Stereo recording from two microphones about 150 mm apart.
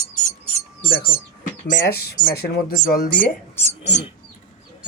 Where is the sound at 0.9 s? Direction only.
80° left.